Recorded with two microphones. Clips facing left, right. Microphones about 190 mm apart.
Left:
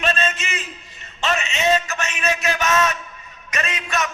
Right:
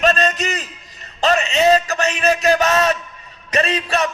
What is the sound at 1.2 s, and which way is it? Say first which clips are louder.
A man's voice: right 7 dB; 35° right (ahead or behind).